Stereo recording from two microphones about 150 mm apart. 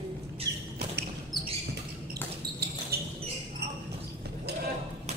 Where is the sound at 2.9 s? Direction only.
90° right.